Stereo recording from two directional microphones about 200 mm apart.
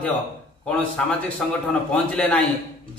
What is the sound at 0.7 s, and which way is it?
A man's voice, 5° left (ahead or behind).